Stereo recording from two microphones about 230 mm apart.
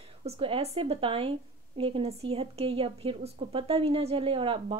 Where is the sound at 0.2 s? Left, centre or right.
Right.